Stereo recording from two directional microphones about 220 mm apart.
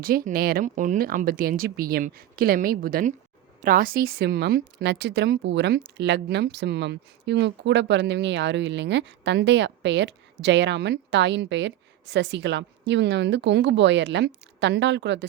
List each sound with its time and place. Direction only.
0.0 s speech: 40° right (ahead or behind)